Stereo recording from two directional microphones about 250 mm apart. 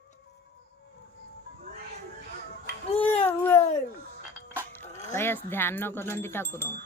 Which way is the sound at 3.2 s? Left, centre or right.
Centre.